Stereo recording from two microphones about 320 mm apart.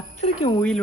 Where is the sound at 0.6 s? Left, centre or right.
Centre.